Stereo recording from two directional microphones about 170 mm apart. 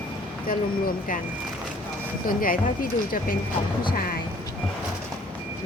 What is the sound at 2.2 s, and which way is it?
Speech, 55° left (ahead or behind).